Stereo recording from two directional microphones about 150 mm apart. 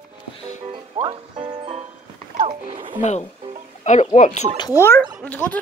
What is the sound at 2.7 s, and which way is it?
Speech, 35° right (ahead or behind).